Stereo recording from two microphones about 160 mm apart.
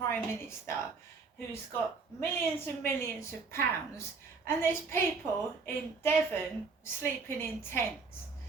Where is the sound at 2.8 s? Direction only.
15° left (ahead or behind).